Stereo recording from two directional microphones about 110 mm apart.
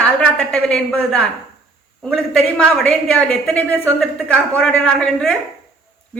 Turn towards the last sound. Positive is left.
turn(degrees=10)  # may be behind; listen again after turning